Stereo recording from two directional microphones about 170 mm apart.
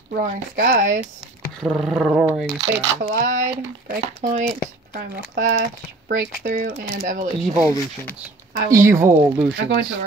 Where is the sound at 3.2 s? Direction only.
45° right (ahead or behind).